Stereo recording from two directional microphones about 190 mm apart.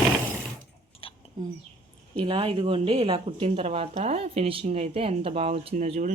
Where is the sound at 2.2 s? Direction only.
25° right (ahead or behind).